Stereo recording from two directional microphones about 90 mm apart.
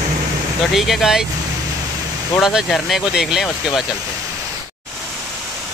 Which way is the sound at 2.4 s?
5° right (ahead or behind).